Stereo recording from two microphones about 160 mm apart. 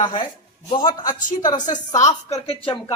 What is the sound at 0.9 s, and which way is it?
A woman's voice, 55° left (ahead or behind).